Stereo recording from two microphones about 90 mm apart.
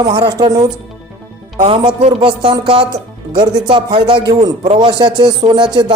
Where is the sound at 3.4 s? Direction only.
55° right (ahead or behind).